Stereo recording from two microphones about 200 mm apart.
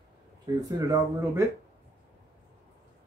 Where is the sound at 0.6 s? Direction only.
20° right (ahead or behind).